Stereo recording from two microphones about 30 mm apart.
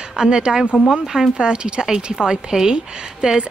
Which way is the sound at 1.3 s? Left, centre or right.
Right.